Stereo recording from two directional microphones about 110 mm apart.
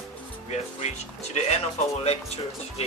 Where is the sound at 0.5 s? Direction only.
90° left.